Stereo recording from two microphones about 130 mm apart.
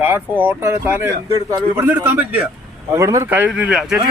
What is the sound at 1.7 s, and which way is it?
Speech, 15° right (ahead or behind).